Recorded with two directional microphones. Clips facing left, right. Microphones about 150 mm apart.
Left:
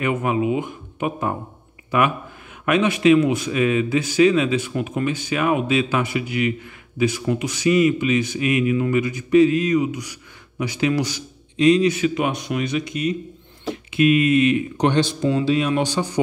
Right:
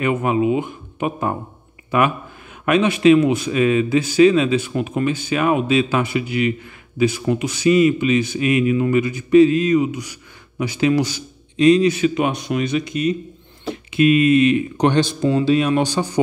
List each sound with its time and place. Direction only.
0.0 s a man's voice: 30° right (ahead or behind)